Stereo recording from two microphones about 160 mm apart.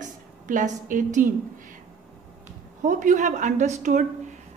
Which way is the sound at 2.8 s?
50° right (ahead or behind).